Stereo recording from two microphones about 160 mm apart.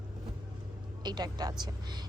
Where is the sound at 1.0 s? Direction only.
25° right (ahead or behind).